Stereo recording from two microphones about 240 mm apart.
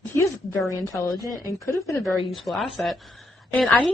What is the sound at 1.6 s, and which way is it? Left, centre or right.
Speech, centre.